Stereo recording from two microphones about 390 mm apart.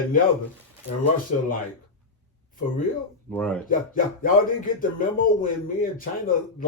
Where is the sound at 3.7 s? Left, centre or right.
Left.